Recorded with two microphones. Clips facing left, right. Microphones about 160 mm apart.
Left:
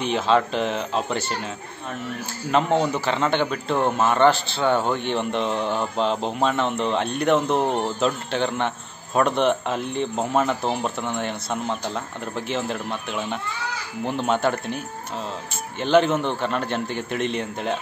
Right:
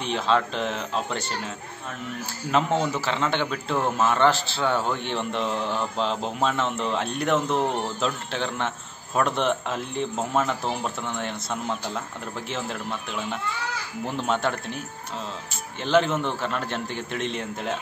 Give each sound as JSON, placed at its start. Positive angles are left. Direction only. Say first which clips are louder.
{"t": 0.0, "sound": "speech", "louder": "left 3 dB", "side_deg": 5}
{"t": 2.5, "sound": "speech", "louder": "left 3 dB", "side_deg": 0}
{"t": 7.5, "sound": "speech", "louder": "left 3 dB", "side_deg": 30}
{"t": 8.0, "sound": "speech", "louder": "left 5 dB", "side_deg": 0}